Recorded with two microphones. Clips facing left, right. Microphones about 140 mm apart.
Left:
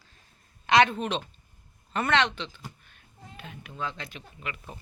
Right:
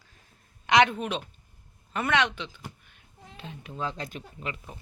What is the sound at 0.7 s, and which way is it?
A woman's voice, 15° right (ahead or behind).